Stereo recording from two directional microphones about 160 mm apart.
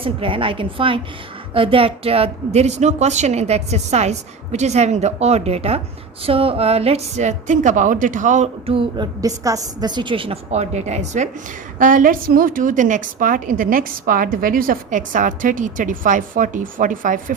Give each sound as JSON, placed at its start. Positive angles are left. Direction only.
{"t": 0.0, "sound": "a woman's voice", "side_deg": -35}
{"t": 8.6, "sound": "a woman's voice", "side_deg": -35}
{"t": 11.8, "sound": "a woman's voice", "side_deg": -55}